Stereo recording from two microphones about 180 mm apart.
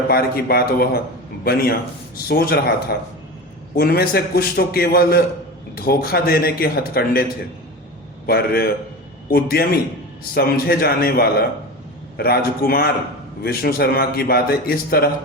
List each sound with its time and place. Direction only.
0.1 s a man's voice: 55° left (ahead or behind)
3.8 s a man's voice: 55° left (ahead or behind)
8.3 s a man's voice: 60° left (ahead or behind)